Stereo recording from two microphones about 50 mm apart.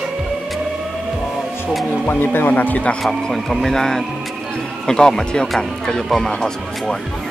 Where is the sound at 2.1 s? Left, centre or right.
Left.